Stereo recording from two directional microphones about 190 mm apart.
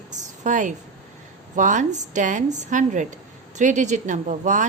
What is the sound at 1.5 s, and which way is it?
Speech, 40° right (ahead or behind).